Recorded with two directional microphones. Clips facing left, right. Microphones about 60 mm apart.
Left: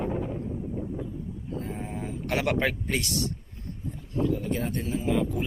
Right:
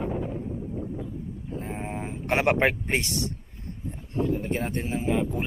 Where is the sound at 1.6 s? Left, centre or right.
Right.